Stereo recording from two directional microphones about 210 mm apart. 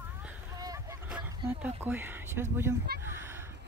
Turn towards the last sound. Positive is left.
turn(degrees=-10)  # may be behind; listen again after turning